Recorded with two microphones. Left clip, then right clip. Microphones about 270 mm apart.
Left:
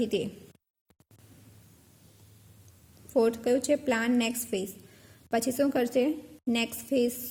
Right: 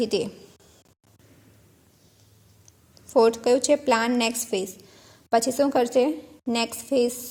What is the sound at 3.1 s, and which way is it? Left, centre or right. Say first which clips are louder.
A woman's voice: right 6 dB; centre.